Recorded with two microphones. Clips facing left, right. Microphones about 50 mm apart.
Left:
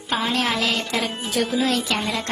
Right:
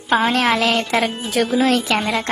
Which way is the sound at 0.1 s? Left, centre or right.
Right.